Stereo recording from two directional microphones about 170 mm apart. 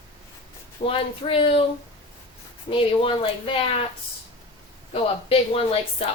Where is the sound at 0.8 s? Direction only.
30° left (ahead or behind).